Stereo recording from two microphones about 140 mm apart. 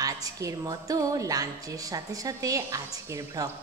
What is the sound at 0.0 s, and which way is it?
A woman's voice, 25° right (ahead or behind).